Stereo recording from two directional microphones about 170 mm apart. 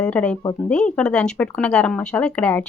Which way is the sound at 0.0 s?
5° left (ahead or behind).